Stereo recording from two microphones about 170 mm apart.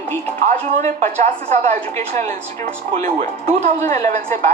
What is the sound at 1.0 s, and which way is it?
Speech, 45° right (ahead or behind).